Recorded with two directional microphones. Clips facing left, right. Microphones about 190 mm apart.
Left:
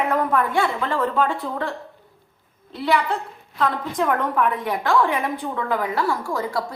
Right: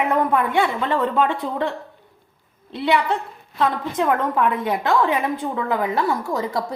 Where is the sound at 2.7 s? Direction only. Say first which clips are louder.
Right 1 dB; 25° right (ahead or behind).